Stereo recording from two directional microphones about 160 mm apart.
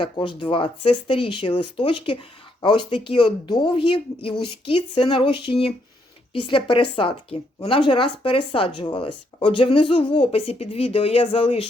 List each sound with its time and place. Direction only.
0.0 s speech: 30° left (ahead or behind)